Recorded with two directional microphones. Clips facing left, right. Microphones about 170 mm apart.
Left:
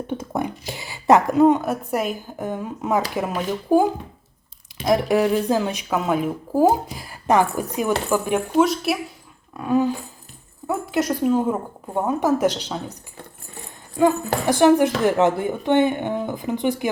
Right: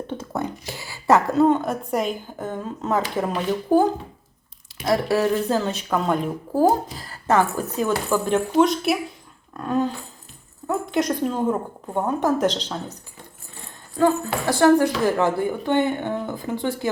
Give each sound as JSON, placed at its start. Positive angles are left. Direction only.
{"t": 0.1, "sound": "a sound", "side_deg": 15}
{"t": 0.6, "sound": "a woman's voice", "side_deg": 20}
{"t": 14.0, "sound": "a woman's voice", "side_deg": 15}